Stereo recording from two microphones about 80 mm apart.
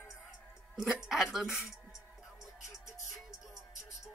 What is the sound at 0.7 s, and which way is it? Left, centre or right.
Speech, centre.